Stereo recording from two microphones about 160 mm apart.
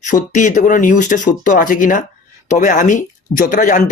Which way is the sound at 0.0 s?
55° left (ahead or behind).